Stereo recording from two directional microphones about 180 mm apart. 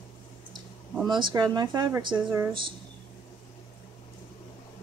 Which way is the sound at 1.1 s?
25° right (ahead or behind).